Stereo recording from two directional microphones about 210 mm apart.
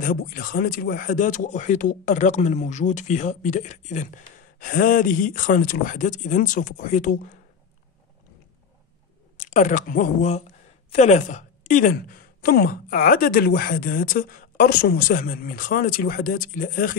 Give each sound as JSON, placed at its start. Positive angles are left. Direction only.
{"t": 0.0, "sound": "speech", "side_deg": 45}
{"t": 9.4, "sound": "a woman's voice", "side_deg": 35}